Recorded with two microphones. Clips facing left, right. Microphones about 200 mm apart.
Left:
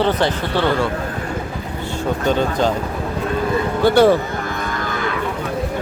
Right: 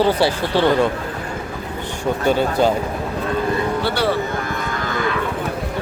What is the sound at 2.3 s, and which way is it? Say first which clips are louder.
Speech: right 1 dB; 10° right (ahead or behind).